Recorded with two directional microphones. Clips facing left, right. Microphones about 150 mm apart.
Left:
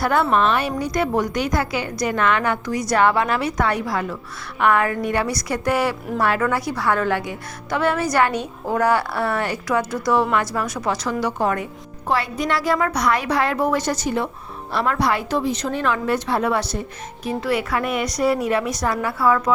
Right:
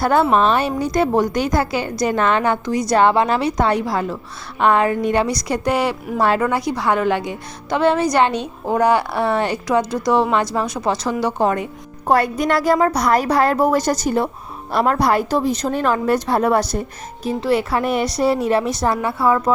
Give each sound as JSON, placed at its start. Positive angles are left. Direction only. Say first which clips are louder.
{"t": 0.0, "sound": "a woman's voice", "louder": "right 3 dB", "side_deg": -30}
{"t": 12.0, "sound": "a woman's voice", "louder": "right 5 dB", "side_deg": -45}
{"t": 17.2, "sound": "a woman's voice", "louder": "right 4 dB", "side_deg": -30}